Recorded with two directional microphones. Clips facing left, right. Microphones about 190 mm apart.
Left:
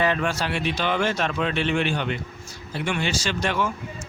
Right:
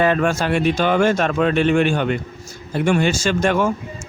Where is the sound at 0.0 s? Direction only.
50° right (ahead or behind).